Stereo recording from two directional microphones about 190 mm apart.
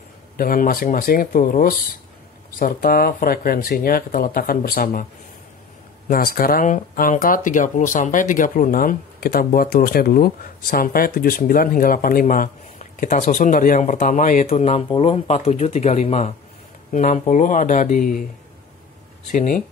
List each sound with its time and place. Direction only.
0.4 s speech: 50° left (ahead or behind)
6.0 s speech: 50° left (ahead or behind)
19.3 s speech: 40° left (ahead or behind)